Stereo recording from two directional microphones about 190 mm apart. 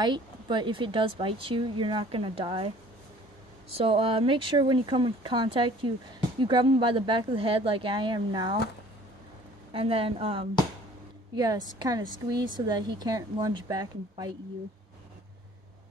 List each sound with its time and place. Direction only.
0.0 s speech: 25° right (ahead or behind)
3.7 s speech: 30° right (ahead or behind)
9.7 s speech: 30° right (ahead or behind)